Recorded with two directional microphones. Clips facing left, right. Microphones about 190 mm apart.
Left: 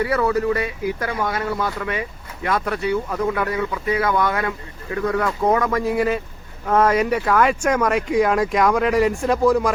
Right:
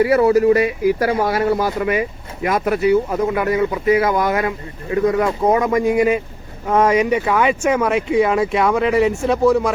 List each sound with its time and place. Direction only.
0.0 s speech: 25° right (ahead or behind); by 9.7 s 5° right (ahead or behind)